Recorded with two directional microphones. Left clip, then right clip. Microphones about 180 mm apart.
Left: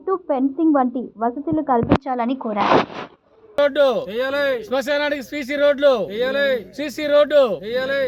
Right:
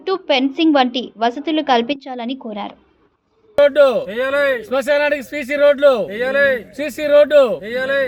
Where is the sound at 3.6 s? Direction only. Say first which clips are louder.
Right 5 dB; 20° left (ahead or behind).